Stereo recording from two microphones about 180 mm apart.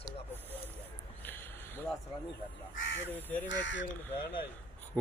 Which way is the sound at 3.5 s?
80° left.